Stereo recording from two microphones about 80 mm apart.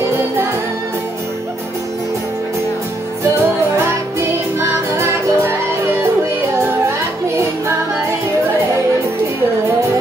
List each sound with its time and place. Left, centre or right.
3.7 s music: right